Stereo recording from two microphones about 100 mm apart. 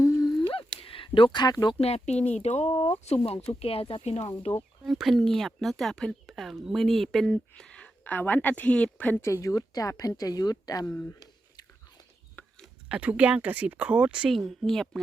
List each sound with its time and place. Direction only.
0.0 s a sound: 35° left (ahead or behind)
0.3 s a sound: 50° left (ahead or behind)
0.8 s speech: 65° left (ahead or behind); by 1.7 s 45° left (ahead or behind)
1.8 s speech: 90° left
3.6 s speech: 75° left (ahead or behind)
4.9 s speech: centre (ahead or behind); by 9.2 s 15° left (ahead or behind)
9.2 s a woman's voice: 30° left (ahead or behind)
11.2 s biting: 40° left (ahead or behind)
12.9 s speech: 15° right (ahead or behind); by 15.0 s 5° left (ahead or behind)